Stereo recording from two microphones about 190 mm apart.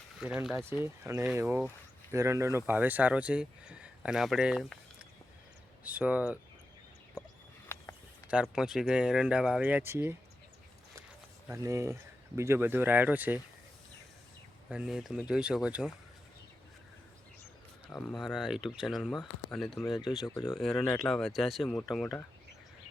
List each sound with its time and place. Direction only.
0.2 s speech: 5° right (ahead or behind)
5.8 s speech: 10° right (ahead or behind)
8.3 s speech: 5° right (ahead or behind)
11.5 s speech: 15° right (ahead or behind)
14.7 s speech: 5° right (ahead or behind)
17.8 s speech: 5° left (ahead or behind)